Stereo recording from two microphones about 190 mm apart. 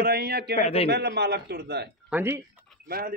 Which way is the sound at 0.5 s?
35° left (ahead or behind).